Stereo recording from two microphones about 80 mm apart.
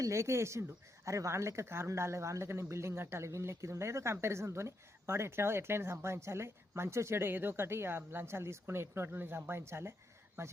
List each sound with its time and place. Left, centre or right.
0.0 s speech: right